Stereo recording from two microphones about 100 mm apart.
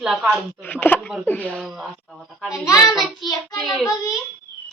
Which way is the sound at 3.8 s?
35° left (ahead or behind).